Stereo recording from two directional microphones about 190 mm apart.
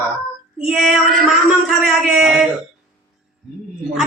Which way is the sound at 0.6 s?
5° right (ahead or behind).